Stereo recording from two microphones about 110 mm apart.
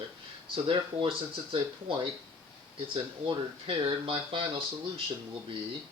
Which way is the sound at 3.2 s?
50° right (ahead or behind).